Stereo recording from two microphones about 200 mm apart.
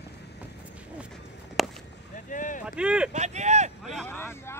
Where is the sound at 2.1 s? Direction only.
40° left (ahead or behind).